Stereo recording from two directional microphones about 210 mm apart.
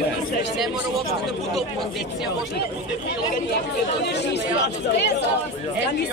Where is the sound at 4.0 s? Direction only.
50° left (ahead or behind).